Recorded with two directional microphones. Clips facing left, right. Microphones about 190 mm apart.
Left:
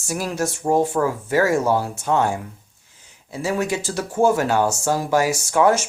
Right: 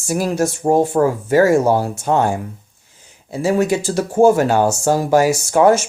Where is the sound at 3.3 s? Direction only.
30° right (ahead or behind).